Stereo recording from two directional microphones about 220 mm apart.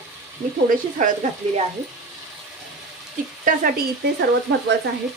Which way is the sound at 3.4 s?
40° right (ahead or behind).